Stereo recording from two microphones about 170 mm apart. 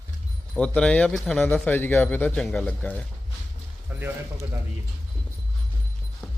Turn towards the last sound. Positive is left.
turn(degrees=-10)  # may be behind; listen again after turning